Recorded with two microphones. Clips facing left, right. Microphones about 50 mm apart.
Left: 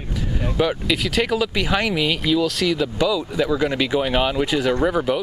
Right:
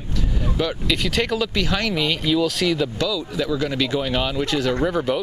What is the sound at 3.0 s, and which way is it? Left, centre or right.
Speech, centre.